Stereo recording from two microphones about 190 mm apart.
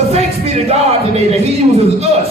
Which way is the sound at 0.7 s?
35° right (ahead or behind).